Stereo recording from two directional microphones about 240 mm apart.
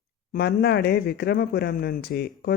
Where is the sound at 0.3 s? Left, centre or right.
Left.